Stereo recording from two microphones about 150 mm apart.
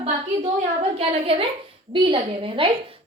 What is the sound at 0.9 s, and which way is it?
A woman's voice, 40° right (ahead or behind).